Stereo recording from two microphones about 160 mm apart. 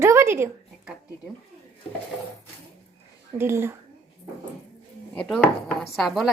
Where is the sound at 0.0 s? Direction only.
15° right (ahead or behind).